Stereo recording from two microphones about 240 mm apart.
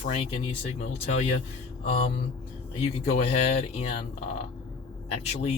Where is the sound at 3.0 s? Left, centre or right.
Left.